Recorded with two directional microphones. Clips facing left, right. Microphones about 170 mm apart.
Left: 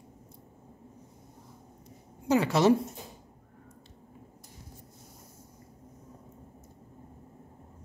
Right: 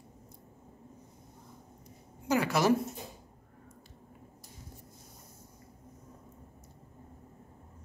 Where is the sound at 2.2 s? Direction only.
25° left (ahead or behind).